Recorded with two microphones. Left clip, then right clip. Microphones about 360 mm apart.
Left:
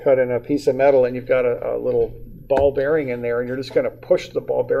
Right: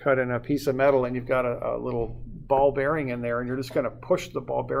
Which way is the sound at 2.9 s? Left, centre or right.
Right.